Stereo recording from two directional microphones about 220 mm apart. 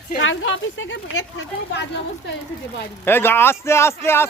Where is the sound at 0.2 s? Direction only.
60° left (ahead or behind).